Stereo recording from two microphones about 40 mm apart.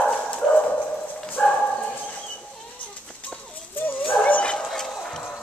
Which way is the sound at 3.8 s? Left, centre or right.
Left.